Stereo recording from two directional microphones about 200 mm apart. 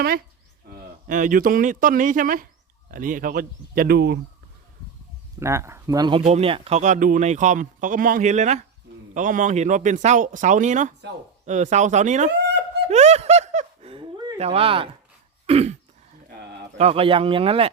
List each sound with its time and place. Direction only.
0.7 s speech: 40° right (ahead or behind)
5.4 s speech: 15° right (ahead or behind); by 12.3 s 35° right (ahead or behind)
12.9 s snicker: 35° right (ahead or behind)
15.4 s throat clearing: 30° right (ahead or behind)
16.7 s speech: 30° right (ahead or behind)